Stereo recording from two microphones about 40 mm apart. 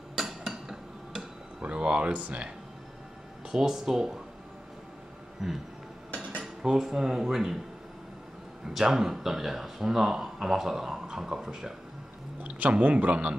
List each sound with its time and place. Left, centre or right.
0.2 s hammer: centre
1.6 s speech: right
3.5 s speech: centre
5.4 s speech: centre
6.1 s cutlery: right
6.4 s speech: centre
8.7 s speech: centre
12.4 s speech: right